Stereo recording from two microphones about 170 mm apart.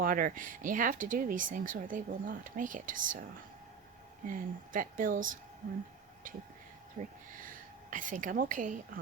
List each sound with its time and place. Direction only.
0.0 s speech: 55° right (ahead or behind)
4.3 s a woman's voice: 55° right (ahead or behind)